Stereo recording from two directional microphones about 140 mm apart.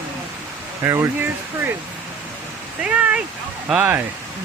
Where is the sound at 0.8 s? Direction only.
20° right (ahead or behind).